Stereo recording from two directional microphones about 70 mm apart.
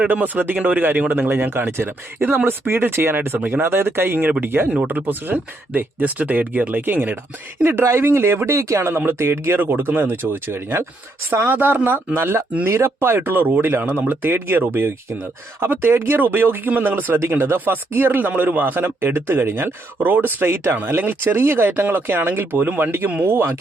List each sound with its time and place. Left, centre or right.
0.1 s speech: right